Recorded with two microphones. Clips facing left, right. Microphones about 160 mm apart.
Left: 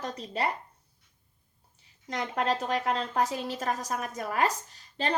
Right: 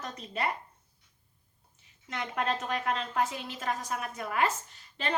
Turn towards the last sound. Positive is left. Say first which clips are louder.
# left 4 dB
turn(degrees=35)  # may be behind; listen again after turning